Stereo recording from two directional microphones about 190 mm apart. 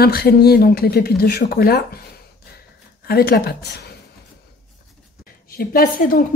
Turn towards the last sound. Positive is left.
turn(degrees=45)  # may be behind; listen again after turning